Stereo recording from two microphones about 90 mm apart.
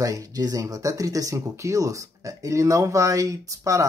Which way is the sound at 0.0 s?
40° right (ahead or behind).